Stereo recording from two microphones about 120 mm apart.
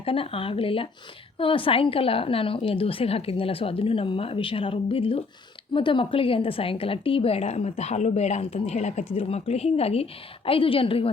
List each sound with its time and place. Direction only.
0.0 s a woman's voice: 50° left (ahead or behind)